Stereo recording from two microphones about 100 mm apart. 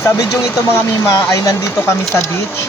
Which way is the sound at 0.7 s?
25° left (ahead or behind).